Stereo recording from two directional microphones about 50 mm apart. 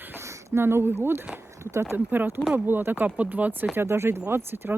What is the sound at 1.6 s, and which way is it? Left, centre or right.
Speech, right.